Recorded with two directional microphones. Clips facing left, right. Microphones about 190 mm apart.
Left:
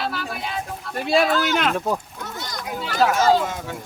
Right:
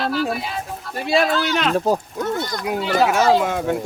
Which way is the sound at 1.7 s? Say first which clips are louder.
Right 5 dB; 30° right (ahead or behind).